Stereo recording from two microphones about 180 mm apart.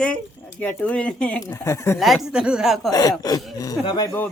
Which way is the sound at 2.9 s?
20° left (ahead or behind).